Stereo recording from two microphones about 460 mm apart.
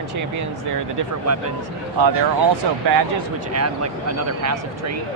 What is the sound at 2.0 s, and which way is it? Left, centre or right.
Speech, right.